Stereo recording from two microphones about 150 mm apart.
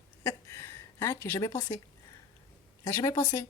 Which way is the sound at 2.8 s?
20° left (ahead or behind).